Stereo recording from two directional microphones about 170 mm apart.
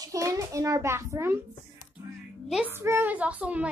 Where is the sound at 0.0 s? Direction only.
20° right (ahead or behind).